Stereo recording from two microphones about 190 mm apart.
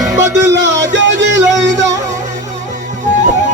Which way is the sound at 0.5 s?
70° right (ahead or behind).